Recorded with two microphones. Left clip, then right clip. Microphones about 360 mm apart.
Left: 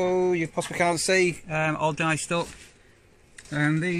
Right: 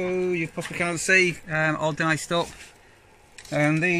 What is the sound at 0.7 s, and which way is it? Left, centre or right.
Speech, centre.